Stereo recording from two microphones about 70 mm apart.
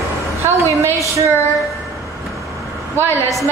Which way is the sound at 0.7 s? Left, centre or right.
Right.